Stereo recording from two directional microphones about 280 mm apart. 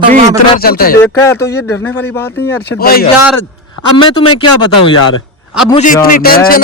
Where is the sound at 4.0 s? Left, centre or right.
Centre.